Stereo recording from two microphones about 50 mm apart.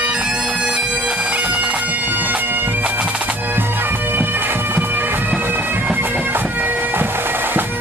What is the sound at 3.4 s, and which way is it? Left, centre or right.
Bagpipes, right.